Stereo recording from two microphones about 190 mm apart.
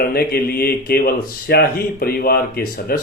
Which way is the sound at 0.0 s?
55° left (ahead or behind).